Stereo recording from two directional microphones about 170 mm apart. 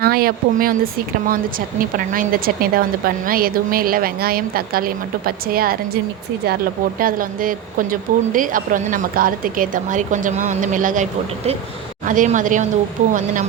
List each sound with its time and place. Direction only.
0.0 s a woman's voice: 60° right (ahead or behind)
7.0 s a woman's voice: 55° right (ahead or behind)